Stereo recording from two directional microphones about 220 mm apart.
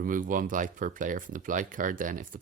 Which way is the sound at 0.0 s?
40° right (ahead or behind).